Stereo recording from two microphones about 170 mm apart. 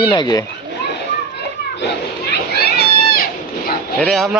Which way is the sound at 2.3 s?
65° left (ahead or behind).